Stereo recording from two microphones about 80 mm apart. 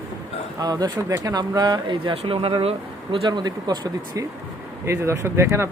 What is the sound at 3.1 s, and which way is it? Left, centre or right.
Speech, right.